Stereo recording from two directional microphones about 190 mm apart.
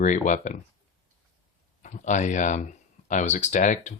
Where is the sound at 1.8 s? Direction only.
40° left (ahead or behind).